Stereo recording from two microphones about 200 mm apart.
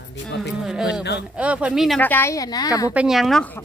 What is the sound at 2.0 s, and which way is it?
Speech, 10° left (ahead or behind).